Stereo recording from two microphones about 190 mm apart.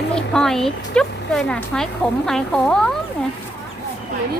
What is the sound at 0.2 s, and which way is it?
Speech, 5° left (ahead or behind).